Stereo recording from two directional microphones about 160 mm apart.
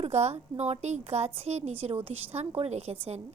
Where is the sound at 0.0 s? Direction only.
40° right (ahead or behind).